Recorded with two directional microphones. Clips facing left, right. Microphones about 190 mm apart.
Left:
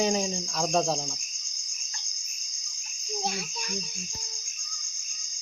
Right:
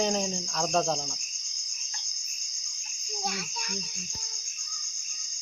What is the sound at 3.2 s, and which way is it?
Cricket, 30° left (ahead or behind).